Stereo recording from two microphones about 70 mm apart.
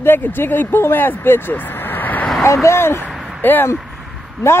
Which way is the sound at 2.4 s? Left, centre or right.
Left.